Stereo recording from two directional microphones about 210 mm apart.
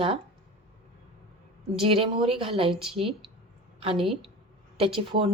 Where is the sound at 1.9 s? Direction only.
25° right (ahead or behind).